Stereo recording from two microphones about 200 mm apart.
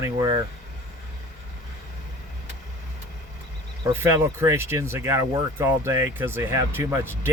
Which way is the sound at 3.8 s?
10° right (ahead or behind).